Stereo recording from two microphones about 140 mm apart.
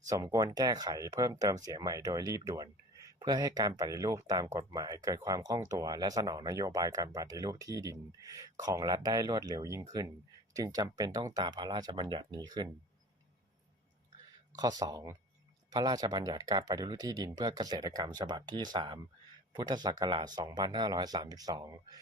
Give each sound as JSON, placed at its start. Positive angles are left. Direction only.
{"t": 0.0, "sound": "speech", "side_deg": -25}
{"t": 14.5, "sound": "speech", "side_deg": -25}